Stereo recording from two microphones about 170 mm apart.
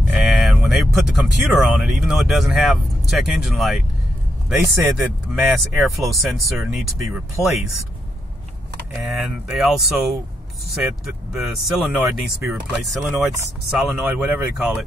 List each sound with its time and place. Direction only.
0.1 s speech: centre (ahead or behind)
9.0 s speech: centre (ahead or behind)
11.3 s speech: centre (ahead or behind)
13.1 s speech: 15° right (ahead or behind)
13.7 s speech: 5° right (ahead or behind)